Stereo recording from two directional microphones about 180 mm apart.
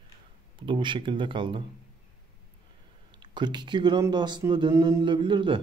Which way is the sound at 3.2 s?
25° right (ahead or behind).